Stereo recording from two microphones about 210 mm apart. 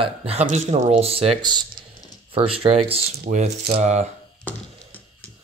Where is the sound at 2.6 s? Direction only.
25° right (ahead or behind).